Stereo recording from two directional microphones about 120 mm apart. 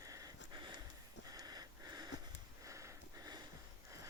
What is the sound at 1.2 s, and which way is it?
Sniff, 30° right (ahead or behind).